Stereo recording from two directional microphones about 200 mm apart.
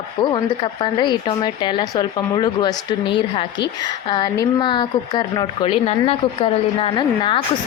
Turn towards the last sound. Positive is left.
turn(degrees=25)  # may be behind; listen again after turning